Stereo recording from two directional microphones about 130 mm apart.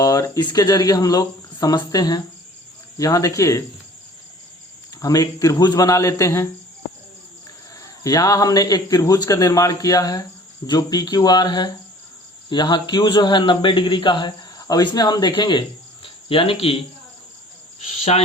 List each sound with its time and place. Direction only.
0.0 s speech: 25° left (ahead or behind)
4.9 s speech: 25° left (ahead or behind)
8.0 s a man's voice: 25° left (ahead or behind)
16.0 s cricket: 45° left (ahead or behind)
17.7 s cricket: 60° left (ahead or behind)